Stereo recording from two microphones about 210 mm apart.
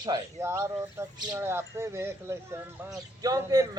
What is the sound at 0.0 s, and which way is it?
A man's voice, 15° right (ahead or behind).